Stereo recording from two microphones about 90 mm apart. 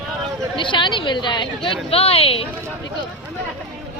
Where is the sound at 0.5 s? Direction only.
70° left (ahead or behind); by 2.5 s 90° left.